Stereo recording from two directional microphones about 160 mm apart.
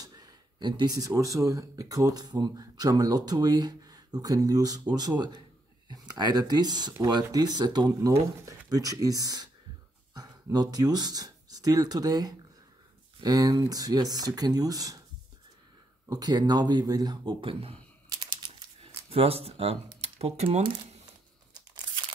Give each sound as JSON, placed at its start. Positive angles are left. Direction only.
{"t": 0.0, "sound": "speech", "side_deg": -25}
{"t": 16.1, "sound": "speech", "side_deg": -25}
{"t": 18.1, "sound": "typing", "side_deg": -25}
{"t": 19.0, "sound": "speech", "side_deg": -40}